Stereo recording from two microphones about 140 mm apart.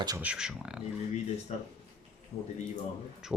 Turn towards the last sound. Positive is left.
turn(degrees=-5)  # may be behind; listen again after turning